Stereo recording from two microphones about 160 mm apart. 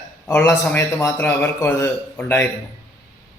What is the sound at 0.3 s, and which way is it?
A man's voice, 15° left (ahead or behind).